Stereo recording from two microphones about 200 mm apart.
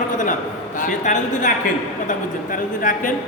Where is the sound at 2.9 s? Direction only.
40° left (ahead or behind).